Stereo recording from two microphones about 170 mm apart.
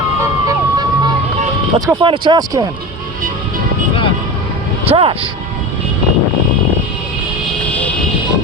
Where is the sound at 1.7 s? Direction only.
25° right (ahead or behind).